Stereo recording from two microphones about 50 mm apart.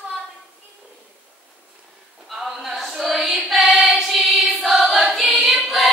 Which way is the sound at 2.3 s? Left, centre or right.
Centre.